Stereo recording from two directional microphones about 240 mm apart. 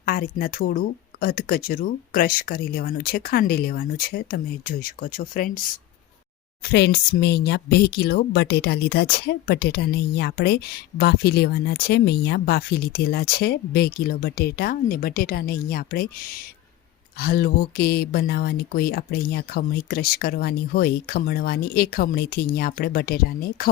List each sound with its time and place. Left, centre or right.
0.0 s speech: left
6.6 s speech: left